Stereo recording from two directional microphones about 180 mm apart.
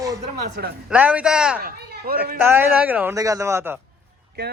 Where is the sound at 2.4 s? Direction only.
10° right (ahead or behind).